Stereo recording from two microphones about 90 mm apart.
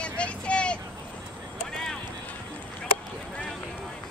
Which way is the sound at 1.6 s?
5° left (ahead or behind).